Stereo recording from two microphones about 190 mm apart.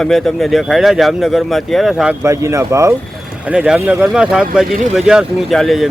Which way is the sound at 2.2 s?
15° right (ahead or behind).